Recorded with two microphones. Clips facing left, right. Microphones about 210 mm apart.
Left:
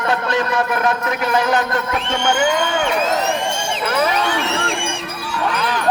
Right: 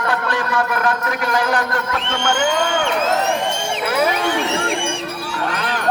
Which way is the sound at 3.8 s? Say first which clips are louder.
Even; 10° right (ahead or behind).